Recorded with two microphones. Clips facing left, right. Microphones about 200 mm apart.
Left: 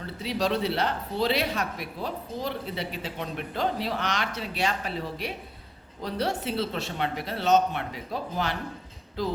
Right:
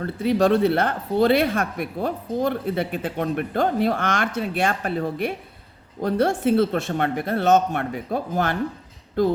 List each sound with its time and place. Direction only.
0.0 s speech: 55° right (ahead or behind)